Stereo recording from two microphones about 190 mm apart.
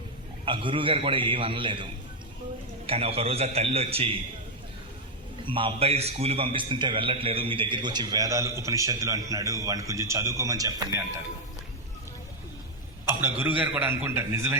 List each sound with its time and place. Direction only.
0.4 s a man's voice: 25° right (ahead or behind)
5.5 s a man's voice: 25° right (ahead or behind)
13.1 s speech: 10° right (ahead or behind)